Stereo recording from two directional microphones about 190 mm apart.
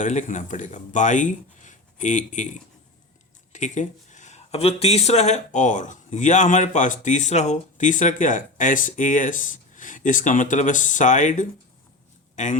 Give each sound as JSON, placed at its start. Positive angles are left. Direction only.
{"t": 0.0, "sound": "speech", "side_deg": 40}